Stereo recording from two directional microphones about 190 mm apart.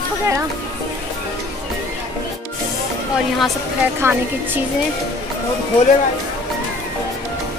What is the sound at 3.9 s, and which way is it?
Speech, 10° right (ahead or behind).